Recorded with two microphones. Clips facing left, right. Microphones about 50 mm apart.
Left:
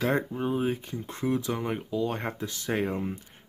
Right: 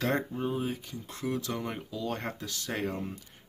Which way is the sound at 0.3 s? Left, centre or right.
Centre.